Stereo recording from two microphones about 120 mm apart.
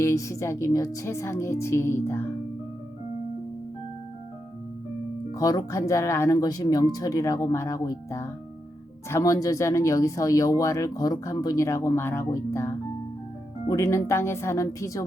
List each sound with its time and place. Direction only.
0.0 s speech: 25° left (ahead or behind)
5.3 s speech: 30° left (ahead or behind)